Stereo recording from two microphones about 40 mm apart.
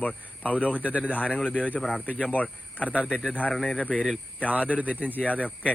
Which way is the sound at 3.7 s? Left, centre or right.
Left.